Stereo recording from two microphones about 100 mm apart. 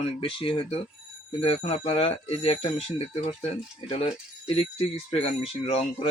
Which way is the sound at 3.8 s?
75° left (ahead or behind).